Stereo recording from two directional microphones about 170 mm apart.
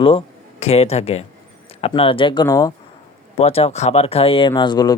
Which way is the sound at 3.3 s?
35° left (ahead or behind).